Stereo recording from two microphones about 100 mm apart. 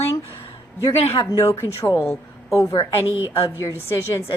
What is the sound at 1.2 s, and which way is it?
Speech, 30° left (ahead or behind).